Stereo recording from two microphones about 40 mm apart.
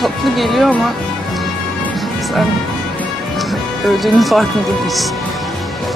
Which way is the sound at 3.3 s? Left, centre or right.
Centre.